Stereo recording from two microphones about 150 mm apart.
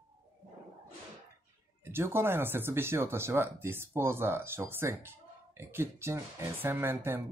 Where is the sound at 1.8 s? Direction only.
15° right (ahead or behind).